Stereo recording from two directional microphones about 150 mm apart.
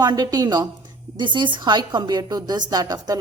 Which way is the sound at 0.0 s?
25° right (ahead or behind).